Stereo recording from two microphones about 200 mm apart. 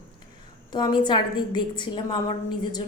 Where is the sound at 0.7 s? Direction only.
20° left (ahead or behind).